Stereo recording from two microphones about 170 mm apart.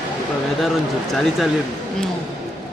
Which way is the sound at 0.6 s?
Centre (ahead or behind).